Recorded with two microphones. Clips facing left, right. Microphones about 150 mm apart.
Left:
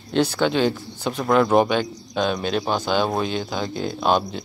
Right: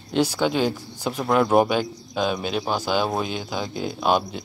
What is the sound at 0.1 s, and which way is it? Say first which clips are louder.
Speech: left 1 dB; 10° right (ahead or behind).